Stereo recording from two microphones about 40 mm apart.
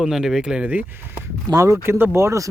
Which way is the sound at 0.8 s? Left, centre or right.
Right.